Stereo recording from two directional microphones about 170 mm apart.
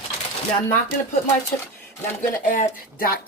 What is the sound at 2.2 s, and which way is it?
Speech, 50° left (ahead or behind).